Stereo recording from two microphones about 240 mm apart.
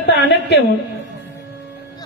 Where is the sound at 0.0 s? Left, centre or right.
Left.